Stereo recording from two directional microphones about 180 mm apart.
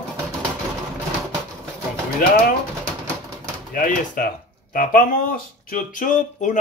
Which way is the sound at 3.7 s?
50° left (ahead or behind).